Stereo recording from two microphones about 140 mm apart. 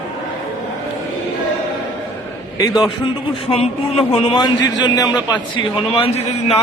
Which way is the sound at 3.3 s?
45° left (ahead or behind).